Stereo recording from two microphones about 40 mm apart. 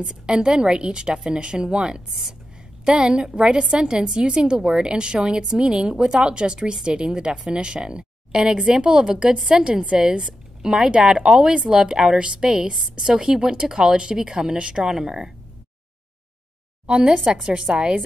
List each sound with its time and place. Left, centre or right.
0.0 s a woman's voice: right
14.8 s speech: centre
16.8 s a woman's voice: right
17.2 s speech: centre
17.5 s a woman's voice: right